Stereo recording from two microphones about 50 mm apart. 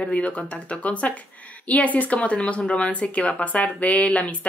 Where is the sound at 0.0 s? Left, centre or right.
Left.